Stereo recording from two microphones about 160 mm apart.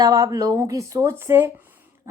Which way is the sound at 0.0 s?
20° right (ahead or behind).